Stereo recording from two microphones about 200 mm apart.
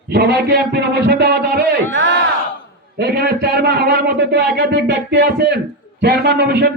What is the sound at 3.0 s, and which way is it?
A man's voice, 55° right (ahead or behind).